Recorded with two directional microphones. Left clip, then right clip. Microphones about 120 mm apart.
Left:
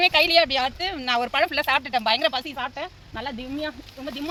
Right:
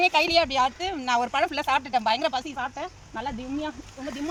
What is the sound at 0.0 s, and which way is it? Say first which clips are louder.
Speech: left 3 dB; centre (ahead or behind).